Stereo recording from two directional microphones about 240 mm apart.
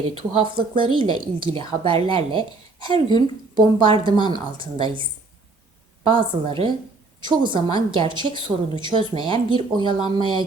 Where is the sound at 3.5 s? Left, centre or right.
Right.